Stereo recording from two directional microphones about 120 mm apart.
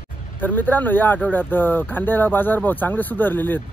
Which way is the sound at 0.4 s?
15° left (ahead or behind).